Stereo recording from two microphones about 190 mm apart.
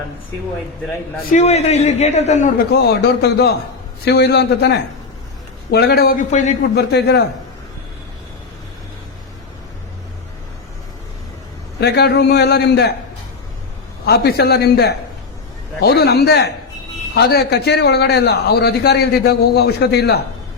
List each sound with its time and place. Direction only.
1.3 s a man's voice: 35° left (ahead or behind)
2.7 s a man's voice: 60° left (ahead or behind); by 6.6 s 40° left (ahead or behind)
6.6 s a man's voice: 60° left (ahead or behind)
11.8 s a man's voice: 60° left (ahead or behind)
14.1 s a man's voice: 60° left (ahead or behind)